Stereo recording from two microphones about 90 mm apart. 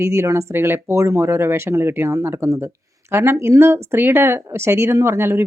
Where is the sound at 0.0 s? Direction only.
30° right (ahead or behind).